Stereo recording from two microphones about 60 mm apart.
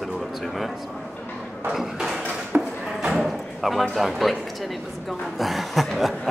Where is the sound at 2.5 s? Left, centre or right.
Right.